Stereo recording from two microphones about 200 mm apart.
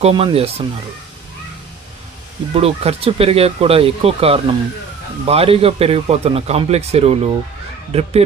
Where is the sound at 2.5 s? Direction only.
30° right (ahead or behind).